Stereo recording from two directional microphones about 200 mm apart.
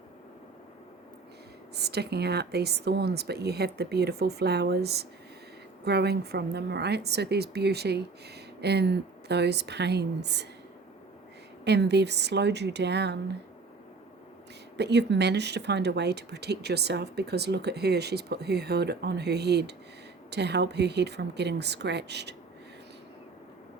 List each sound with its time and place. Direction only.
1.7 s speech: 55° right (ahead or behind)
11.6 s speech: 55° right (ahead or behind)
14.8 s speech: 60° right (ahead or behind)